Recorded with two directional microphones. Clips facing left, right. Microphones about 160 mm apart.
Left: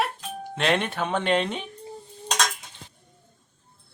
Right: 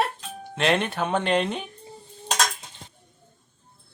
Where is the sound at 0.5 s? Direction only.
Centre (ahead or behind).